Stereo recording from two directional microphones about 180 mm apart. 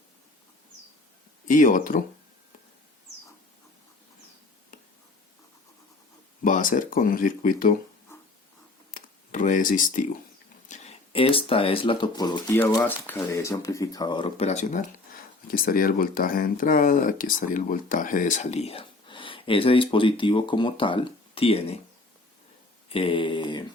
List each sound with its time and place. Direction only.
1.5 s speech: 45° left (ahead or behind)
4.7 s a sound: 50° left (ahead or behind)
6.4 s speech: 50° left (ahead or behind)
8.9 s a sound: 45° left (ahead or behind)
10.7 s speech: 35° left (ahead or behind)
12.5 s speech: 10° left (ahead or behind); by 14.8 s 40° left (ahead or behind)
15.4 s speech: 55° left (ahead or behind); by 21.8 s 35° left (ahead or behind)
22.9 s speech: 30° left (ahead or behind)